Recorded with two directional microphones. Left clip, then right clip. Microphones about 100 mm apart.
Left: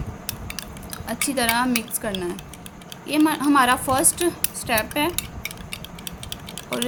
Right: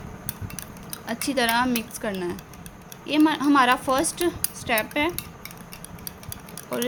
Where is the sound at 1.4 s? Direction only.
40° right (ahead or behind).